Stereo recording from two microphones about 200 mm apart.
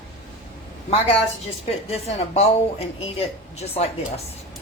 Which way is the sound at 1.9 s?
30° left (ahead or behind).